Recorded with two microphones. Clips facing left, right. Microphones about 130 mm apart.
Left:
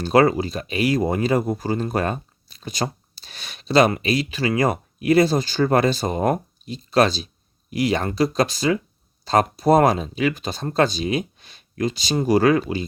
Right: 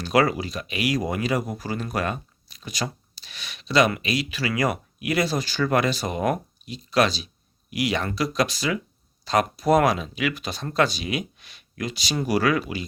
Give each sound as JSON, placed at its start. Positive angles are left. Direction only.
{"t": 0.0, "sound": "speech", "side_deg": 30}